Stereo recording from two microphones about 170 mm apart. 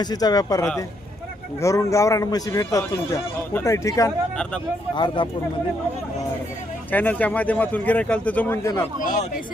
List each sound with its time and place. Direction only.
0.0 s speech: 25° left (ahead or behind)
1.6 s speech: 20° left (ahead or behind)
6.9 s speech: 10° left (ahead or behind)
9.0 s speech: 50° left (ahead or behind)